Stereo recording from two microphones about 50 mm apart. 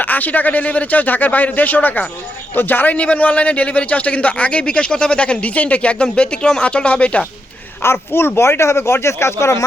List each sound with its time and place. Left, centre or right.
0.0 s speech: left
2.9 s a man's voice: left
7.8 s speech: left